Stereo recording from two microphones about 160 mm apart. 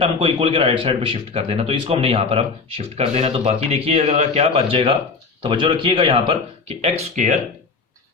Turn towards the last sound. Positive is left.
turn(degrees=-45)  # may be behind; listen again after turning